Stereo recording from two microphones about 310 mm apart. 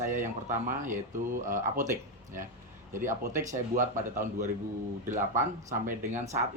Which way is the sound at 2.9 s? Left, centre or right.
Centre.